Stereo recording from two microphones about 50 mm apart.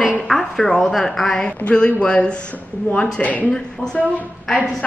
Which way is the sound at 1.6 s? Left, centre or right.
Left.